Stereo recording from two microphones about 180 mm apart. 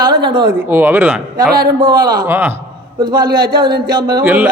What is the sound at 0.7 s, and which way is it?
Speech, 10° right (ahead or behind).